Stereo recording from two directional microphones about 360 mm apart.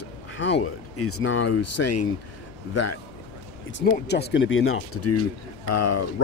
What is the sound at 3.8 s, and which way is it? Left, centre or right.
Speech, left.